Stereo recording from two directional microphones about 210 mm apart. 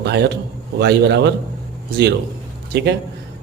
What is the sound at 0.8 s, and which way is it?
Speech, 50° right (ahead or behind).